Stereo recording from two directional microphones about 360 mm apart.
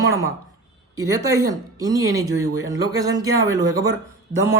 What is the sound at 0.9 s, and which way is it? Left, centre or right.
Speech, centre.